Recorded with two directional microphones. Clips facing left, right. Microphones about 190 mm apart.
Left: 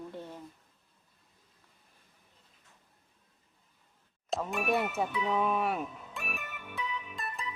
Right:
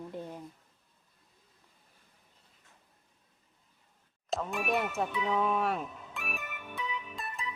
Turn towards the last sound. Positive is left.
turn(degrees=0)  # may be behind; listen again after turning